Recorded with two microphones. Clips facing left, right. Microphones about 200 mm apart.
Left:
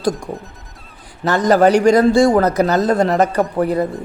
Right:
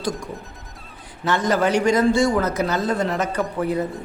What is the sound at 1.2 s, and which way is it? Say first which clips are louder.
Speech: left 7 dB; 40° left (ahead or behind).